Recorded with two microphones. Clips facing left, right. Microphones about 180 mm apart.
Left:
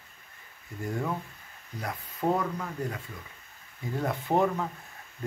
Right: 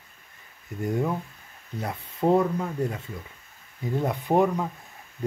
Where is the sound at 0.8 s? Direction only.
20° right (ahead or behind).